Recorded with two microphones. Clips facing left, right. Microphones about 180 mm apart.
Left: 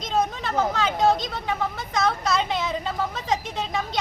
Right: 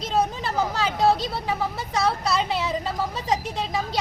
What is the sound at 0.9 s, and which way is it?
Speech, 35° right (ahead or behind).